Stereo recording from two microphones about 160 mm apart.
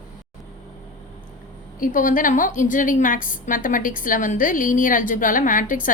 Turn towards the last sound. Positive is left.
turn(degrees=55)  # may be behind; listen again after turning